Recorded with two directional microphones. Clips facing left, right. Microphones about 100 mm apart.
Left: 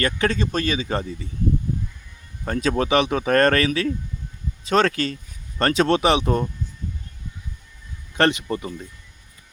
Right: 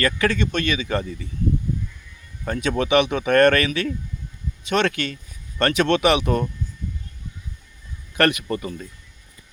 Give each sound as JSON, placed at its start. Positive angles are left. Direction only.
{"t": 0.0, "sound": "speech", "side_deg": 30}
{"t": 2.4, "sound": "speech", "side_deg": 35}
{"t": 8.1, "sound": "speech", "side_deg": 25}